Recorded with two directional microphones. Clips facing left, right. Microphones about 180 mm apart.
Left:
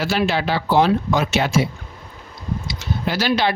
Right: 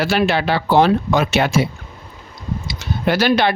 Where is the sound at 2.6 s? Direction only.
60° right (ahead or behind).